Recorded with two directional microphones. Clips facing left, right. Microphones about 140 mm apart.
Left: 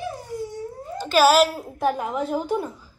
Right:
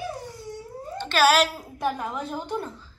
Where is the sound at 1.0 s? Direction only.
5° left (ahead or behind).